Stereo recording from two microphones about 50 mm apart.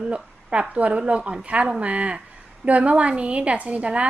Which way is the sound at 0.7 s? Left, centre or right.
Right.